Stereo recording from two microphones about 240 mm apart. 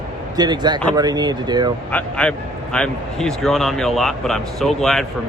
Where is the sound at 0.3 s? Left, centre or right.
Centre.